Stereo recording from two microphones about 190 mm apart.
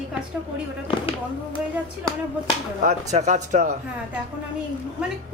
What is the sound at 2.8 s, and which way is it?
Speech, 40° right (ahead or behind).